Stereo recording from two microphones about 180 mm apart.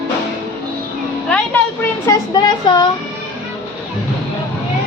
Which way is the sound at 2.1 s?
25° left (ahead or behind).